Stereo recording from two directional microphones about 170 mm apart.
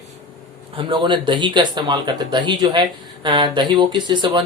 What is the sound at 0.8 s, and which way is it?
Speech, 30° right (ahead or behind).